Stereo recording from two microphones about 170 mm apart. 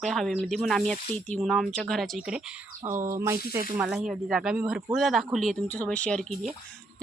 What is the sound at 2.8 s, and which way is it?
Speech, 15° right (ahead or behind).